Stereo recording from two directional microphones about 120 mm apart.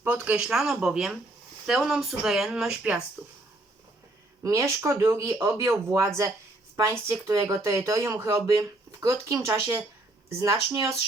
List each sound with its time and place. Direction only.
0.0 s speech: 10° right (ahead or behind)
4.4 s speech: 25° right (ahead or behind)
10.2 s speech: 20° right (ahead or behind)